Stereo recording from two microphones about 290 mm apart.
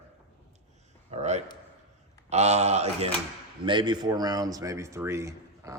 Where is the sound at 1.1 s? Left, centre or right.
Right.